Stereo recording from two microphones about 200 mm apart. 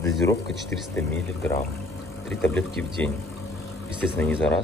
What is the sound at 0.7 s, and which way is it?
Speech, 10° left (ahead or behind).